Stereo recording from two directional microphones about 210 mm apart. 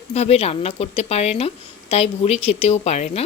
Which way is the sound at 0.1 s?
30° left (ahead or behind).